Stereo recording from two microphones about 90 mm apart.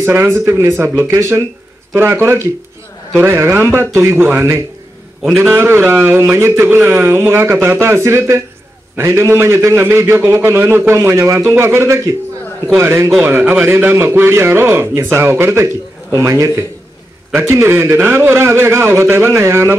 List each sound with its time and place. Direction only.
0.0 s a man's voice: 30° right (ahead or behind)